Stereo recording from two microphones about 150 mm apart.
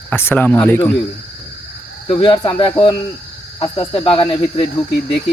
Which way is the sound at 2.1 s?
35° left (ahead or behind).